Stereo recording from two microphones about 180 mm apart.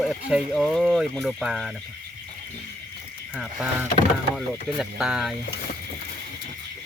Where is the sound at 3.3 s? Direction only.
5° right (ahead or behind).